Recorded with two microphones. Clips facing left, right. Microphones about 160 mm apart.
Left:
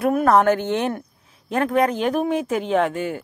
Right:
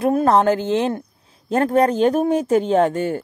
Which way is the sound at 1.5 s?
35° right (ahead or behind).